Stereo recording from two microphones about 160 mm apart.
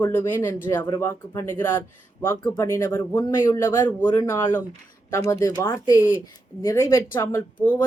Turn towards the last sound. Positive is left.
turn(degrees=15)  # may be behind; listen again after turning